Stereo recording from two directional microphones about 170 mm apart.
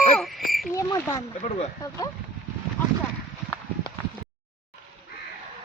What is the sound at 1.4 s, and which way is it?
Speech, 40° left (ahead or behind).